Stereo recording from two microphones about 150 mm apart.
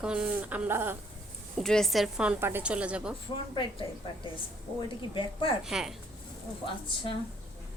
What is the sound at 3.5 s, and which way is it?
Speech, 30° left (ahead or behind).